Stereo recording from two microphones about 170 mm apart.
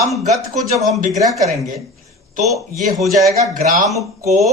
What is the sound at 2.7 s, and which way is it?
A man's voice, 50° right (ahead or behind).